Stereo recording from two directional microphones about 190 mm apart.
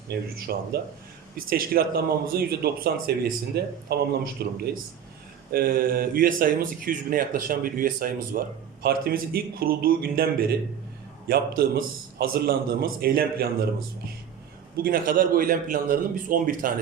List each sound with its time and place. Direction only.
0.1 s speech: 55° right (ahead or behind)
11.3 s speech: 55° right (ahead or behind)
14.8 s speech: 50° right (ahead or behind)